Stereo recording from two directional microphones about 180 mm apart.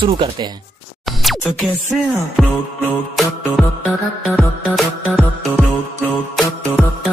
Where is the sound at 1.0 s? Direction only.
Centre (ahead or behind).